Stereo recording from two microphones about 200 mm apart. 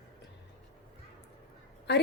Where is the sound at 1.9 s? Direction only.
55° left (ahead or behind).